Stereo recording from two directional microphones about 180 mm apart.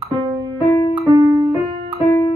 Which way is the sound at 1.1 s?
15° right (ahead or behind).